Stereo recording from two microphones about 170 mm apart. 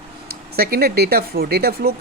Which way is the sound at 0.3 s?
65° right (ahead or behind).